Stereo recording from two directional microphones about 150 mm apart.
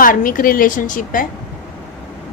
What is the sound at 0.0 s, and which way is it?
A woman's voice, 65° left (ahead or behind).